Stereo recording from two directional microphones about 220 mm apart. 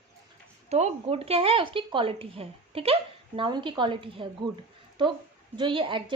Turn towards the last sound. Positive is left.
turn(degrees=-20)  # may be behind; listen again after turning